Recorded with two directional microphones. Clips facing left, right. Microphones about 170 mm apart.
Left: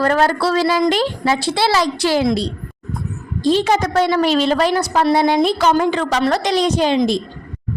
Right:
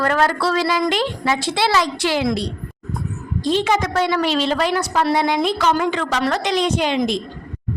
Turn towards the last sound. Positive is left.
turn(degrees=35)  # may be behind; listen again after turning